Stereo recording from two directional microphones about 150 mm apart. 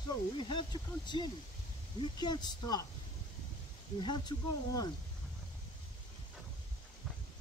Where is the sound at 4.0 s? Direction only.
30° left (ahead or behind).